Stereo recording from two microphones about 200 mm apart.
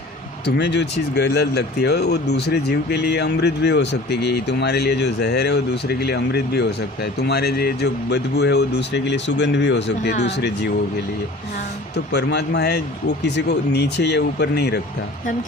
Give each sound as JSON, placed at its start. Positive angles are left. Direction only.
{"t": 0.4, "sound": "speech", "side_deg": 55}
{"t": 12.1, "sound": "speech", "side_deg": 55}